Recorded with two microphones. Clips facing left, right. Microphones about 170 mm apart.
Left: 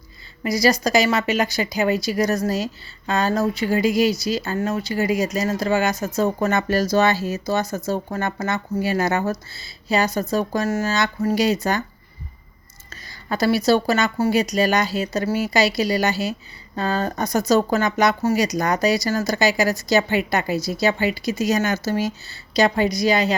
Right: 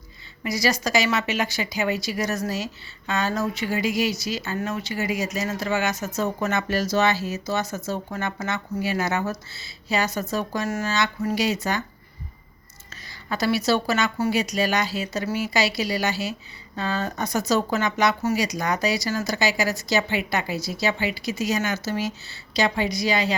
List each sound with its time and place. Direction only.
0.4 s a woman's voice: 35° left (ahead or behind)
10.2 s a woman's voice: 35° left (ahead or behind)
12.9 s a woman's voice: 40° left (ahead or behind)